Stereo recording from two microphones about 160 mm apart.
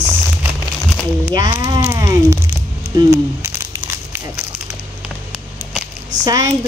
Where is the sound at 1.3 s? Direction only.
25° right (ahead or behind).